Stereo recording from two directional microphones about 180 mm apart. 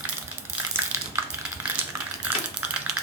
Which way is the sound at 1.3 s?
10° right (ahead or behind).